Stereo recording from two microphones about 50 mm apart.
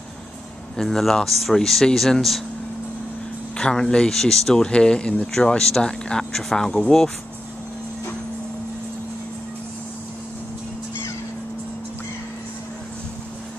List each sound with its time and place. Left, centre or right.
0.7 s speech: centre
3.5 s speech: centre
4.6 s speech: centre